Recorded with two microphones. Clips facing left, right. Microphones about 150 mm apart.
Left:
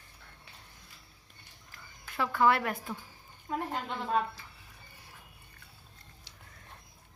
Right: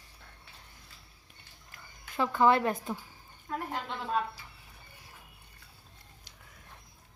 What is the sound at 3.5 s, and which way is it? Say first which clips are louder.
Speech: left 2 dB; 15° left (ahead or behind).